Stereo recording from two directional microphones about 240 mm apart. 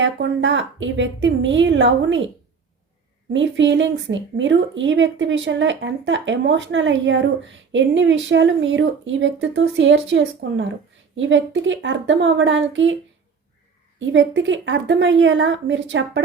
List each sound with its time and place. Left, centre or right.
0.0 s speech: right
3.3 s speech: right
14.1 s speech: right